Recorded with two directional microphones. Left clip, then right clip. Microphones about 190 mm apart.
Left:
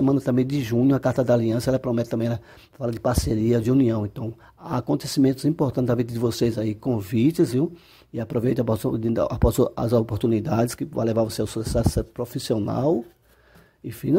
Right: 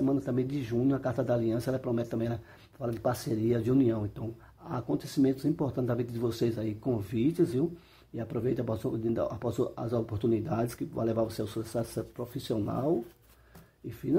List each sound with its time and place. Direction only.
0.0 s speech: 40° left (ahead or behind)